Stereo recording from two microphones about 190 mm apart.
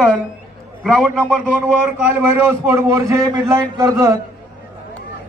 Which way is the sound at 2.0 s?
15° right (ahead or behind).